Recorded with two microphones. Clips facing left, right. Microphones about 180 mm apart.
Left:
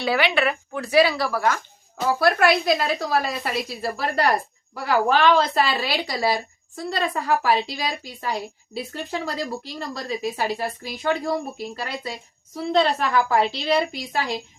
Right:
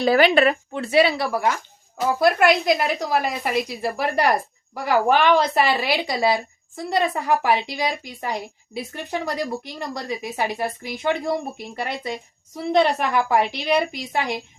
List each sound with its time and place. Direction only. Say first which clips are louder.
0.0 s speech: right 5 dB; 45° right (ahead or behind)
0.7 s a woman's voice: even; 25° right (ahead or behind)